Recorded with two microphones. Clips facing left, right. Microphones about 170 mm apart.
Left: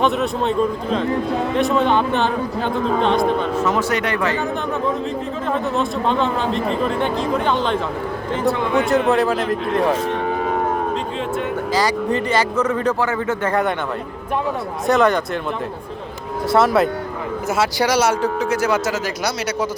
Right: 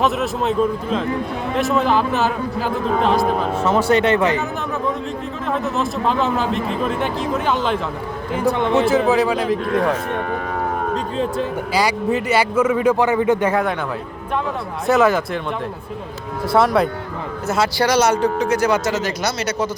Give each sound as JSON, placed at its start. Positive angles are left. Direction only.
{"t": 0.0, "sound": "speech", "side_deg": 0}
{"t": 3.6, "sound": "speech", "side_deg": -30}
{"t": 5.5, "sound": "speech", "side_deg": 0}
{"t": 11.7, "sound": "a man's voice", "side_deg": -10}
{"t": 14.8, "sound": "speech", "side_deg": -5}
{"t": 16.5, "sound": "speech", "side_deg": 0}